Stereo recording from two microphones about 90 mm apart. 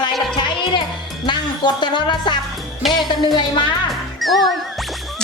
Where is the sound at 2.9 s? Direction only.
50° left (ahead or behind).